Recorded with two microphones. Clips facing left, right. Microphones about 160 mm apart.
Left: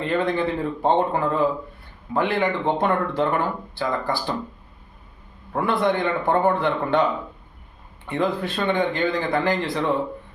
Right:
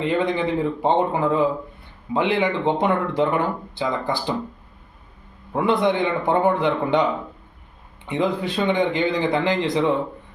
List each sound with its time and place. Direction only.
0.0 s speech: 15° right (ahead or behind)
5.5 s speech: 20° right (ahead or behind)